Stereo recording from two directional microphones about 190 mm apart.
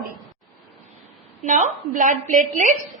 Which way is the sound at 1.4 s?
40° right (ahead or behind).